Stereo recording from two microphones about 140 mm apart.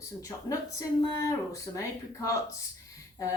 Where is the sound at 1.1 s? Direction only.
25° left (ahead or behind).